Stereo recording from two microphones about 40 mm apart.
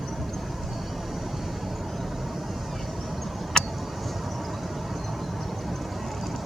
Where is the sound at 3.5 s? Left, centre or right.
Centre.